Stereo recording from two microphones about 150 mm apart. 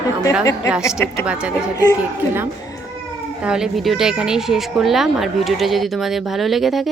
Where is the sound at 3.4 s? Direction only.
5° right (ahead or behind).